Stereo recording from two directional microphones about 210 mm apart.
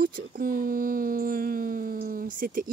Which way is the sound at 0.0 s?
45° right (ahead or behind).